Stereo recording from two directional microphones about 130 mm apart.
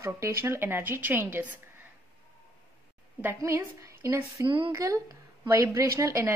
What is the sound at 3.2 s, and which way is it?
A woman's voice, 15° right (ahead or behind).